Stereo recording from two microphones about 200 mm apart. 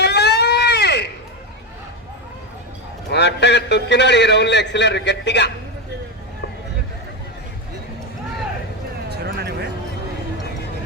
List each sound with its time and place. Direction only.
0.0 s baby cry: 55° left (ahead or behind)
3.1 s a man's voice: 60° left (ahead or behind)
9.0 s a sound: 55° right (ahead or behind)